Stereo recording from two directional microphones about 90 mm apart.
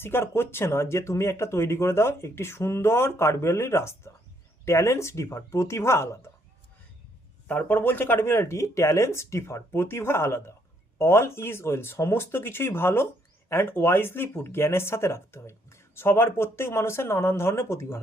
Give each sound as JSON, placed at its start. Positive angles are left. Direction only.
{"t": 0.0, "sound": "speech", "side_deg": 25}
{"t": 7.4, "sound": "speech", "side_deg": 20}